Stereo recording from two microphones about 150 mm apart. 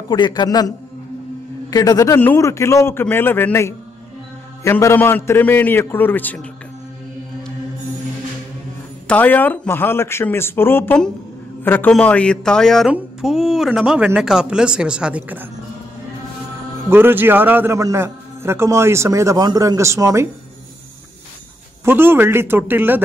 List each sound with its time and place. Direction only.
0.1 s a man's voice: 30° left (ahead or behind); by 6.4 s 10° left (ahead or behind)
9.0 s a man's voice: 10° left (ahead or behind); by 15.4 s 10° right (ahead or behind)
16.9 s a man's voice: 15° right (ahead or behind)
21.8 s a man's voice: 15° right (ahead or behind)